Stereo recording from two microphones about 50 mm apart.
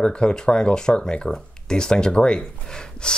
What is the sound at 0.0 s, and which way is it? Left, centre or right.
Speech, centre.